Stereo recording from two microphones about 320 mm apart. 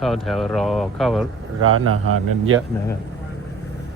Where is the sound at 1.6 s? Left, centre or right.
Right.